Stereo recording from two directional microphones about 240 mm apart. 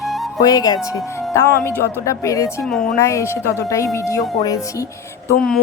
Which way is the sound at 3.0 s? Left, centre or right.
Centre.